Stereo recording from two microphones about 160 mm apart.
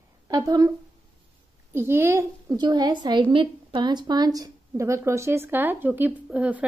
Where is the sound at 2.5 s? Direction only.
25° right (ahead or behind).